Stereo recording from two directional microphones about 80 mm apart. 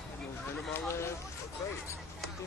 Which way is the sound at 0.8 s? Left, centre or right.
Left.